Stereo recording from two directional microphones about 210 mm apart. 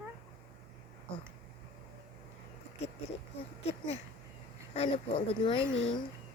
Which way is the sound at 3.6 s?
30° left (ahead or behind).